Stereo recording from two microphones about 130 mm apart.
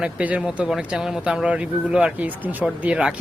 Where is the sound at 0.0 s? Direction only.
10° right (ahead or behind).